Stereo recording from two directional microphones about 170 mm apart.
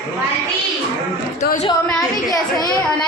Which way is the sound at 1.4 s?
45° left (ahead or behind).